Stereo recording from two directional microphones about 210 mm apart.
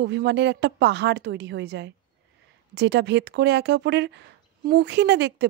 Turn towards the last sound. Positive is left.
turn(degrees=-55)  # may be behind; listen again after turning